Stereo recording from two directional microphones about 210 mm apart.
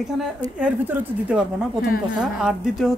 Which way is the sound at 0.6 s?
5° right (ahead or behind).